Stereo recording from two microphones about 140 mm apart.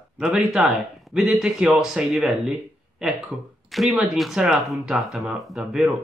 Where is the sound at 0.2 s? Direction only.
5° right (ahead or behind).